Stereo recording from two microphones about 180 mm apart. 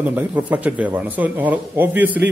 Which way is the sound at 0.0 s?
10° right (ahead or behind).